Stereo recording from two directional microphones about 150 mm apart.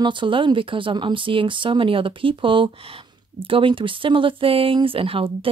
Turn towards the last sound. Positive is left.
turn(degrees=-35)  # may be behind; listen again after turning